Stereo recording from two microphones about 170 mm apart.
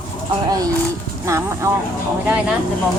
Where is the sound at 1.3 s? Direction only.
15° right (ahead or behind).